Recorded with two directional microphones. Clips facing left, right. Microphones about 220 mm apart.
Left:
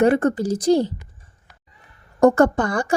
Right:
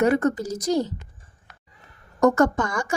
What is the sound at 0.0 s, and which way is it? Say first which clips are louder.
Speech: left 3 dB; 30° left (ahead or behind).